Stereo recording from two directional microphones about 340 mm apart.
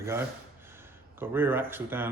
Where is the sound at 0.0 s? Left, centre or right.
Centre.